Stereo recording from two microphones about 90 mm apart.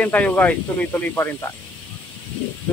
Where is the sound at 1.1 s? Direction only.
30° left (ahead or behind).